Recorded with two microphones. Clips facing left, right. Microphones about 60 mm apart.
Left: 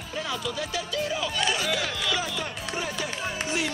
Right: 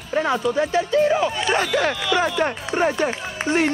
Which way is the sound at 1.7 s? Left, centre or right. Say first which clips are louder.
Right 9 dB; right.